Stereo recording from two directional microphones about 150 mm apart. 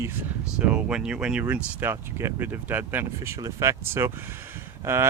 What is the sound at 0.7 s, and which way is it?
Speech, 5° right (ahead or behind).